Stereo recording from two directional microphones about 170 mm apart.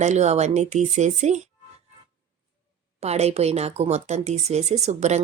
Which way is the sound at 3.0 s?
40° right (ahead or behind).